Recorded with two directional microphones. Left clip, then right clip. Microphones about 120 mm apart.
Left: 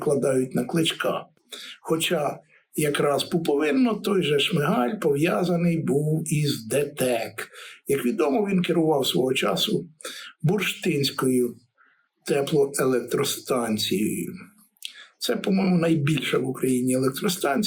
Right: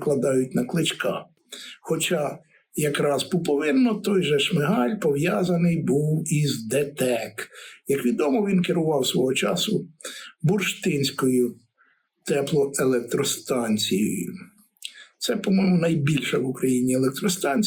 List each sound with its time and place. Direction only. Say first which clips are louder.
0.0 s speech: even; 10° left (ahead or behind)